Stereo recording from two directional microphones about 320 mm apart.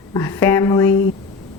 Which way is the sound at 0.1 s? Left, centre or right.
Centre.